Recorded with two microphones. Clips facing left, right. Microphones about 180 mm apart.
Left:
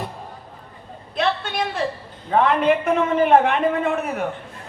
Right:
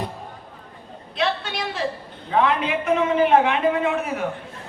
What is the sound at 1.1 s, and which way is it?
A woman's voice, 50° left (ahead or behind).